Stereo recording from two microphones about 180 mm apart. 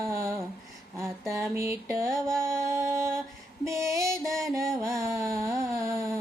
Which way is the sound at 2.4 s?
15° right (ahead or behind).